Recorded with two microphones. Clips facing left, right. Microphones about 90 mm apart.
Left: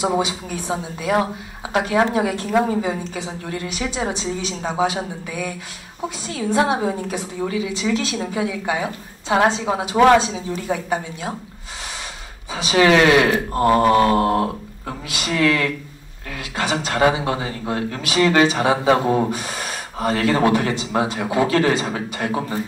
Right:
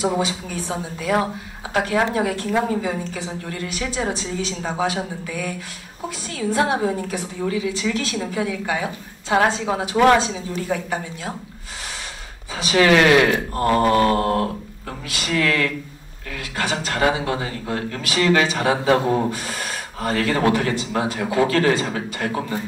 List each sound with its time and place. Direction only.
0.0 s a woman's voice: 20° left (ahead or behind)
6.0 s a woman's voice: 25° left (ahead or behind)
12.5 s a woman's voice: 25° left (ahead or behind)